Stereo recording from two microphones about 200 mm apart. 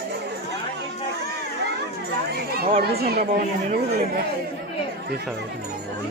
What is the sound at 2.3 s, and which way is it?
Speech, 50° right (ahead or behind).